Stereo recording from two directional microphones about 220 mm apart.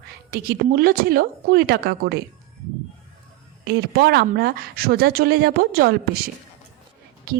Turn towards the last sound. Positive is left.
turn(degrees=-45)  # may be behind; listen again after turning